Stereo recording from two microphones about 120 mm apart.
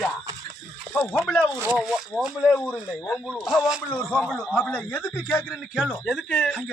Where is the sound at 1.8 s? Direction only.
Centre (ahead or behind).